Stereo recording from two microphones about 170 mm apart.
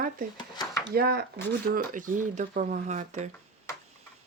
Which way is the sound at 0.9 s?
65° right (ahead or behind).